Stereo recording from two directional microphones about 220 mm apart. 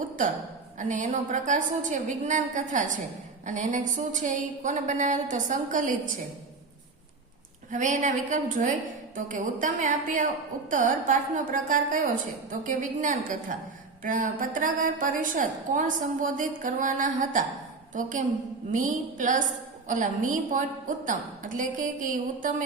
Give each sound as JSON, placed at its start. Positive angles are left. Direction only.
{"t": 0.8, "sound": "a woman's voice", "side_deg": -35}
{"t": 7.7, "sound": "a woman's voice", "side_deg": -35}